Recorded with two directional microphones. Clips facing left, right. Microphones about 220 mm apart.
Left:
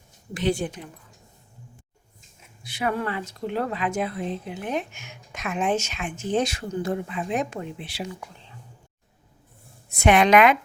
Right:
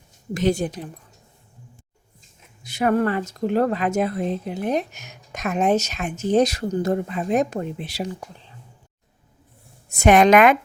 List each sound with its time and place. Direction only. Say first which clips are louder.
0.3 s speech: right 4 dB; 40° right (ahead or behind)
2.6 s speech: right 7 dB; 45° right (ahead or behind)
9.9 s speech: right 3 dB; 45° right (ahead or behind)